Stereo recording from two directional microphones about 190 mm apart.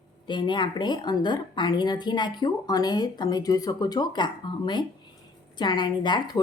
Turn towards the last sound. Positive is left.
turn(degrees=25)  # may be behind; listen again after turning